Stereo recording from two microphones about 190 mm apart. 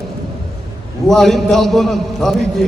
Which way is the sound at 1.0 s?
Centre (ahead or behind).